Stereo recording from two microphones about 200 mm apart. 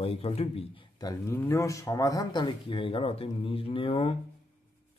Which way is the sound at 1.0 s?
15° left (ahead or behind).